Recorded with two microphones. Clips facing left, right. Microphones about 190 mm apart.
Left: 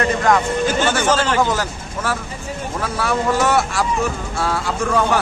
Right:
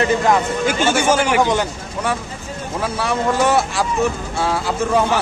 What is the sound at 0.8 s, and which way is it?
Speech, 15° right (ahead or behind).